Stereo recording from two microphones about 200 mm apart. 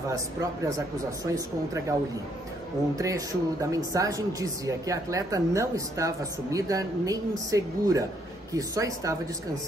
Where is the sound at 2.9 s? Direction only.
15° right (ahead or behind).